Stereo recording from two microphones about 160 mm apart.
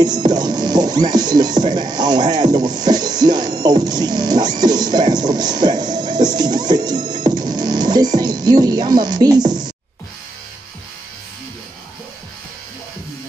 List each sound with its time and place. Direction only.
0.0 s music: 25° right (ahead or behind)